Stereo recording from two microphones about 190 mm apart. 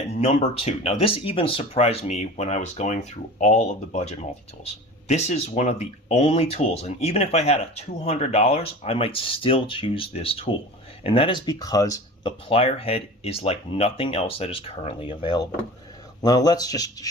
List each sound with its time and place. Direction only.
0.1 s speech: 35° left (ahead or behind); by 12.3 s 20° left (ahead or behind)
12.5 s speech: 30° left (ahead or behind)